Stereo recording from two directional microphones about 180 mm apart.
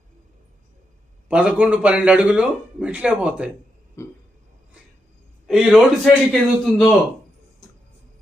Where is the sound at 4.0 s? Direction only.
15° left (ahead or behind).